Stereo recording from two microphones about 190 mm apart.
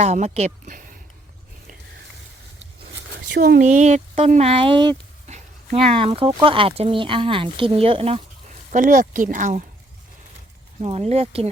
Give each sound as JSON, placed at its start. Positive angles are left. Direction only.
{"t": 0.0, "sound": "speech", "side_deg": -35}
{"t": 3.3, "sound": "speech", "side_deg": -55}
{"t": 3.6, "sound": "speech", "side_deg": -40}
{"t": 8.7, "sound": "speech", "side_deg": -45}
{"t": 11.1, "sound": "speech", "side_deg": -30}